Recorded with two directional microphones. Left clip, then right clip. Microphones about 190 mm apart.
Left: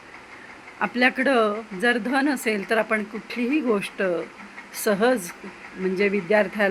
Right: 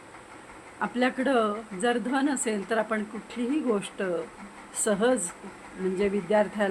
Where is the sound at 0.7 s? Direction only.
15° left (ahead or behind).